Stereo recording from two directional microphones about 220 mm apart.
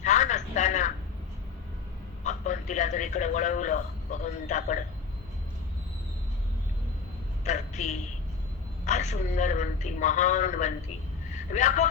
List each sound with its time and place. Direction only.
0.0 s a sound: 35° left (ahead or behind)
2.2 s a man's voice: 35° left (ahead or behind)
7.4 s a woman's voice: 30° left (ahead or behind)